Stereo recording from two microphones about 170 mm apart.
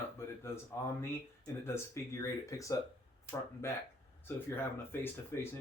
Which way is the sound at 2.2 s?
20° left (ahead or behind).